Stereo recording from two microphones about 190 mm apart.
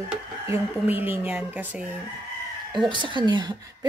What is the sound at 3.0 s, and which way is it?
Speech, 25° right (ahead or behind).